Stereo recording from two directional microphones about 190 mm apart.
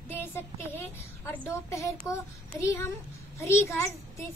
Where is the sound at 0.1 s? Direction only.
10° left (ahead or behind).